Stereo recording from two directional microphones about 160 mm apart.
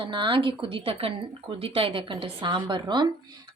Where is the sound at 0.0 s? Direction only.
30° right (ahead or behind).